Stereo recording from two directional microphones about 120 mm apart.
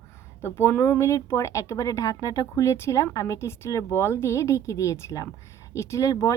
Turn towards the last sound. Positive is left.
turn(degrees=30)  # may be behind; listen again after turning